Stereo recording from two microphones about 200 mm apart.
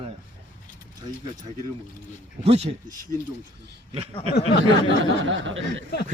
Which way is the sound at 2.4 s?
30° right (ahead or behind).